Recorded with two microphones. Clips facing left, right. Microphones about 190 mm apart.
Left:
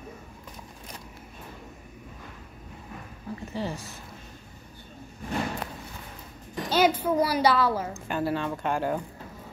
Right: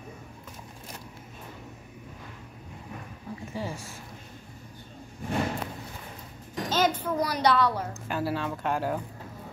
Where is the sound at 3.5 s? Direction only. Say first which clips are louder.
Left 2 dB; 10° right (ahead or behind).